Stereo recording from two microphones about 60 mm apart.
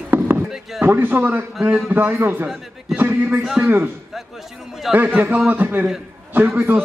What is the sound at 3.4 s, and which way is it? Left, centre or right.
Speech, centre.